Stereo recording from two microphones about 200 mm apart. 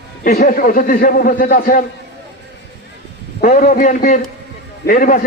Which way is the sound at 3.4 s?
45° left (ahead or behind).